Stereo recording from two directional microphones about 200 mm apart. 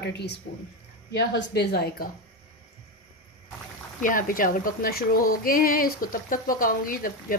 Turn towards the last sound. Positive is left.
turn(degrees=45)  # may be behind; listen again after turning